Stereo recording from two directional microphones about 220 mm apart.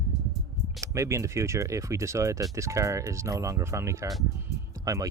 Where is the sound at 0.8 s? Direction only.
15° right (ahead or behind).